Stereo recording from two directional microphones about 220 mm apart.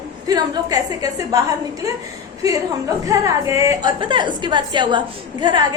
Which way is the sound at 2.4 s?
15° right (ahead or behind).